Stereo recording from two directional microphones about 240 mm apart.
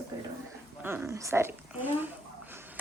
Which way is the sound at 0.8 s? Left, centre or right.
Centre.